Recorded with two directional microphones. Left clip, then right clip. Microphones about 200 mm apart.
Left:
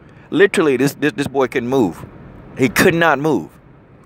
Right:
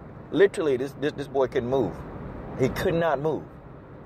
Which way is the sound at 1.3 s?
70° left (ahead or behind).